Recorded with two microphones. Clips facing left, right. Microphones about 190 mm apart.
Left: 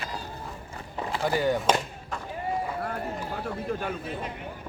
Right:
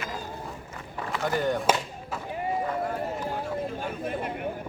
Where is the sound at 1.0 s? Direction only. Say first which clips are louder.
Left 2 dB; 30° left (ahead or behind).